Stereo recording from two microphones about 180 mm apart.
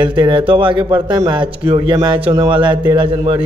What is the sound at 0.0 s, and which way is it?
Speech, 25° right (ahead or behind).